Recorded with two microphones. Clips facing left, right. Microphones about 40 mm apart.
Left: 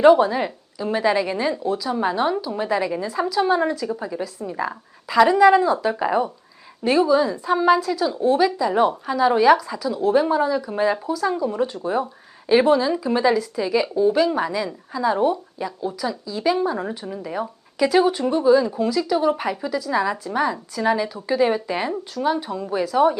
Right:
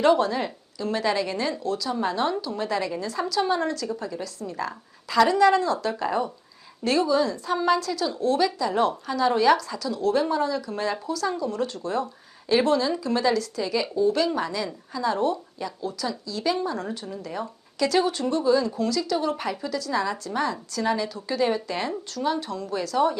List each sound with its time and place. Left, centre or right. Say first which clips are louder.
0.0 s speech: left 6 dB; centre